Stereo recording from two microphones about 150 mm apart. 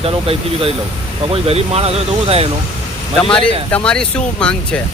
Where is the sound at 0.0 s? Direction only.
40° right (ahead or behind).